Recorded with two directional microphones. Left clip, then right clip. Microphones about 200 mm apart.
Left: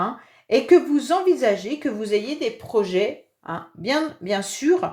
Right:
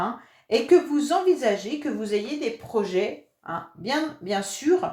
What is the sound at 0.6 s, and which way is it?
Speech, 40° left (ahead or behind).